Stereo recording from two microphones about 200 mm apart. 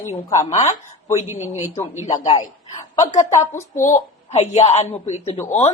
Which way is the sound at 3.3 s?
15° left (ahead or behind).